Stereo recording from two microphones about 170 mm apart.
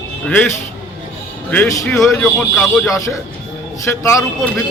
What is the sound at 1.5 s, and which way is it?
Speech, 10° left (ahead or behind).